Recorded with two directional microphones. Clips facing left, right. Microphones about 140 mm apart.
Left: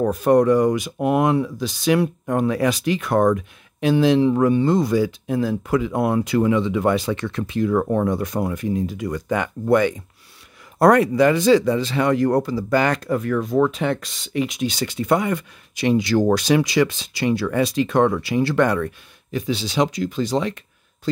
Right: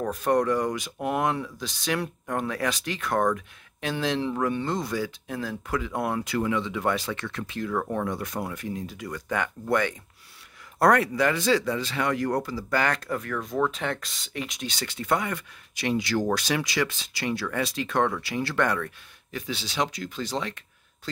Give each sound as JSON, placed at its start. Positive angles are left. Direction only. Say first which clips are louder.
{"t": 0.1, "sound": "speech", "louder": "left 7 dB", "side_deg": 10}
{"t": 7.8, "sound": "speech", "louder": "left 8 dB", "side_deg": 30}